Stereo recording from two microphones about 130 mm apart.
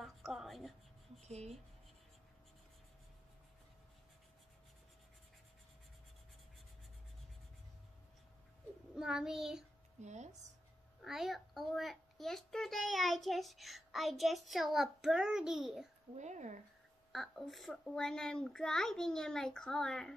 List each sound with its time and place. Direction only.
0.0 s a sound: centre (ahead or behind)
1.2 s speech: 55° right (ahead or behind)
8.9 s child singing: 5° right (ahead or behind)
10.0 s speech: 60° right (ahead or behind)
11.1 s a child's voice: centre (ahead or behind)
16.2 s speech: 65° right (ahead or behind)
17.1 s a child's voice: centre (ahead or behind)